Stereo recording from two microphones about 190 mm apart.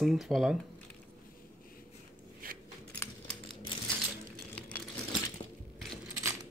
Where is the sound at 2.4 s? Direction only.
50° right (ahead or behind).